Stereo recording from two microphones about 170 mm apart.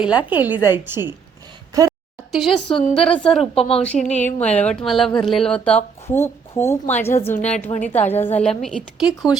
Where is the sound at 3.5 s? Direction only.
35° left (ahead or behind).